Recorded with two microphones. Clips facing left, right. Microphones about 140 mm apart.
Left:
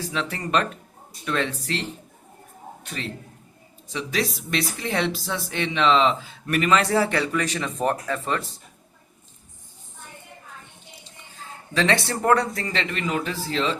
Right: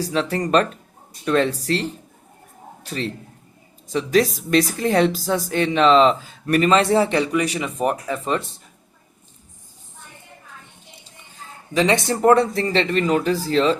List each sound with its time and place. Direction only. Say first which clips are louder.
0.0 s a woman's voice: right 7 dB; 40° right (ahead or behind); by 8.4 s 20° right (ahead or behind)
11.7 s a woman's voice: right 4 dB; 15° right (ahead or behind); by 13.7 s 40° right (ahead or behind)